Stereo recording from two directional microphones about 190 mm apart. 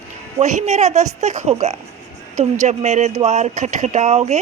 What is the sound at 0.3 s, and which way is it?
A woman's voice, 35° right (ahead or behind).